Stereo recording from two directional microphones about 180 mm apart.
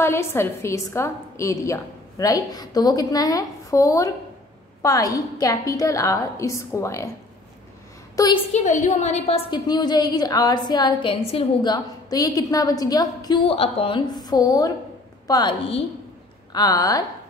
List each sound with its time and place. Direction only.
0.0 s a woman's voice: 15° left (ahead or behind)
8.2 s a woman's voice: 20° left (ahead or behind)
8.5 s a woman's voice: 40° left (ahead or behind)
11.7 s a woman's voice: 20° left (ahead or behind)
16.5 s a woman's voice: 20° left (ahead or behind)